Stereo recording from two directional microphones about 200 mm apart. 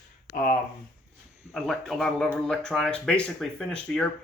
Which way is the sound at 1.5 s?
5° left (ahead or behind).